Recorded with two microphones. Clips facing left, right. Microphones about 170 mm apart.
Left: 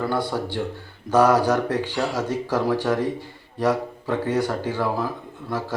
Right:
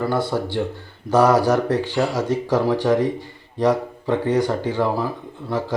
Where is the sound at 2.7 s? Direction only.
15° right (ahead or behind).